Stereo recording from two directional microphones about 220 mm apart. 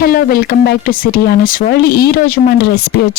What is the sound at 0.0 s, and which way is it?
Speech, 45° left (ahead or behind).